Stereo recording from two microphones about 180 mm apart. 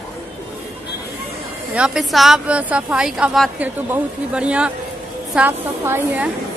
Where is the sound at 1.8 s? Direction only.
5° right (ahead or behind).